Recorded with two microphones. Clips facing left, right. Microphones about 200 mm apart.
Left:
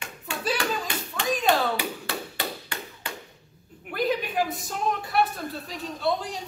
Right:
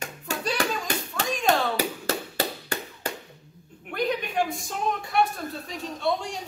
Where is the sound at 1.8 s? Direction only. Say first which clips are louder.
Right 4 dB; 40° right (ahead or behind).